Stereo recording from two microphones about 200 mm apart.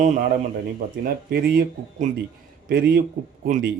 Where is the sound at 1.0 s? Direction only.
45° right (ahead or behind).